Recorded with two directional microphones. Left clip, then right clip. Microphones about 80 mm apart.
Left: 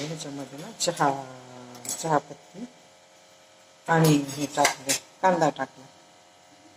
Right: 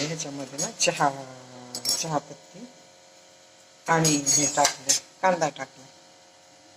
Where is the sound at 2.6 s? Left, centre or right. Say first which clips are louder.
Left 3 dB; left.